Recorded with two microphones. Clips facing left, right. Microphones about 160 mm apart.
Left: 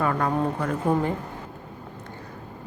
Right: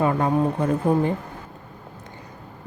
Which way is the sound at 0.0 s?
25° right (ahead or behind).